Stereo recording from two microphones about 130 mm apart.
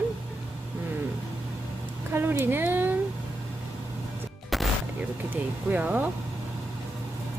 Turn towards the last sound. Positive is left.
turn(degrees=-10)  # may be behind; listen again after turning